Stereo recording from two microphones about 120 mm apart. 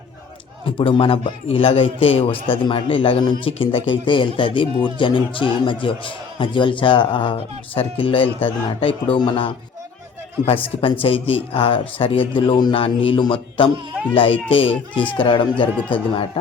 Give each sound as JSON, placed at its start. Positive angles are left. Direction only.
{"t": 0.8, "sound": "a man's voice", "side_deg": 50}